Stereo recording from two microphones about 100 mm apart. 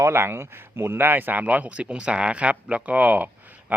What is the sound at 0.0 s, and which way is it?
Speech, 25° right (ahead or behind).